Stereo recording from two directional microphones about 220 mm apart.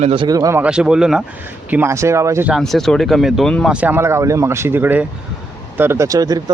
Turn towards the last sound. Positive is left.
turn(degrees=-15)  # may be behind; listen again after turning